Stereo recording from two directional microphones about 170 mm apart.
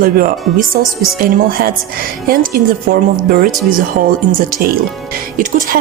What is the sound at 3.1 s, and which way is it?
Speech, 60° right (ahead or behind).